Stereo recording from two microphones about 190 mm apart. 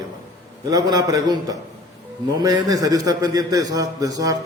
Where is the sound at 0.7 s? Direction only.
20° right (ahead or behind).